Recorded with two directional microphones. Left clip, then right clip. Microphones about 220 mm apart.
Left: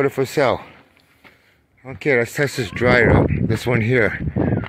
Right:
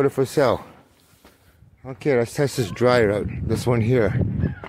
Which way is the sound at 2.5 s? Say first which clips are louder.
Left 2 dB; 15° right (ahead or behind).